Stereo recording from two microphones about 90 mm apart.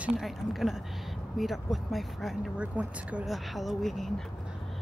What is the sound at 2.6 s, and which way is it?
Speech, 15° right (ahead or behind).